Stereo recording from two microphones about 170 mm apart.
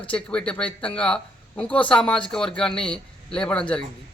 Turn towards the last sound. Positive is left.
turn(degrees=5)  # may be behind; listen again after turning